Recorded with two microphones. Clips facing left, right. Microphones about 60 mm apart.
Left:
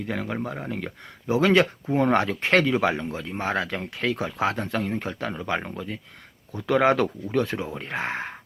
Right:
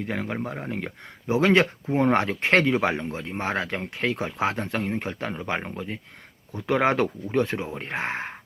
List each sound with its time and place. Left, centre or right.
0.0 s speech: right